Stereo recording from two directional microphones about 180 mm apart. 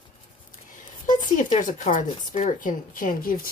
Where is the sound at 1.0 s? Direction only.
45° left (ahead or behind).